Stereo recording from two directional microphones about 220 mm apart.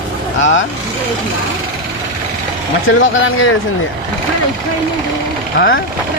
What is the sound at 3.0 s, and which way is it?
Speech, 60° left (ahead or behind).